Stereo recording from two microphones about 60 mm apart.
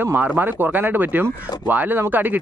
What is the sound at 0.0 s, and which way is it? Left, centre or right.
Speech, right.